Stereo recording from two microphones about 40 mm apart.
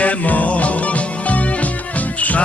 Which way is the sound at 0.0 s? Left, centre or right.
Left.